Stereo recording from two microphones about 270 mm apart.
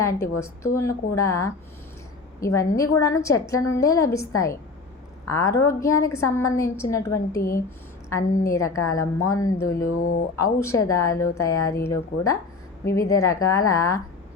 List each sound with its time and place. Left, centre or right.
0.0 s a woman's voice: centre
5.3 s a woman's voice: centre
8.1 s a woman's voice: centre
9.7 s speech: left
10.3 s a woman's voice: centre